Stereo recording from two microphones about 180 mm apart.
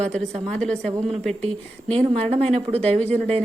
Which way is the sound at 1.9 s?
35° right (ahead or behind).